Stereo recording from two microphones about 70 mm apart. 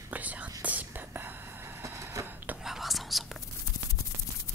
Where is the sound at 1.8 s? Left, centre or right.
Right.